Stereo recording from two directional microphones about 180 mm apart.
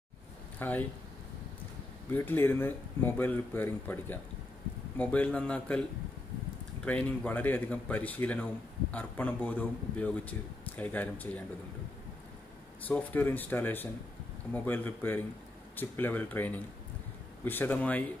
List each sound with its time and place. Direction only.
0.6 s speech: 10° left (ahead or behind)
2.0 s speech: 10° left (ahead or behind)
6.8 s speech: 5° left (ahead or behind)
12.8 s speech: 10° left (ahead or behind)